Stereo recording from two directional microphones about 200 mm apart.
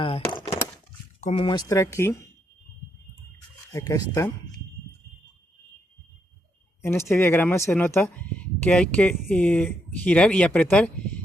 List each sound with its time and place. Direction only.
0.0 s a sound: 25° left (ahead or behind)
1.2 s speech: 25° left (ahead or behind)
3.7 s speech: 15° left (ahead or behind)
7.1 s speech: 10° left (ahead or behind)